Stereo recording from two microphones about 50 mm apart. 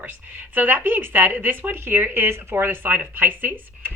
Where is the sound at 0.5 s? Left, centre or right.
Right.